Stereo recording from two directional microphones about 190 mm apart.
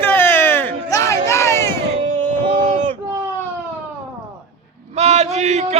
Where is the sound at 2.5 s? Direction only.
40° right (ahead or behind).